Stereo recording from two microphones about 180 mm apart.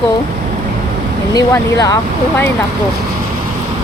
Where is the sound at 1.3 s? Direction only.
20° left (ahead or behind).